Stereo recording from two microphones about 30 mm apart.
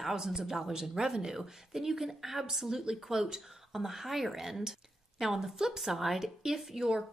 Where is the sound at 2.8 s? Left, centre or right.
Right.